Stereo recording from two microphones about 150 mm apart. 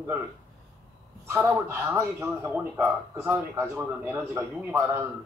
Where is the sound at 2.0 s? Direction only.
15° right (ahead or behind).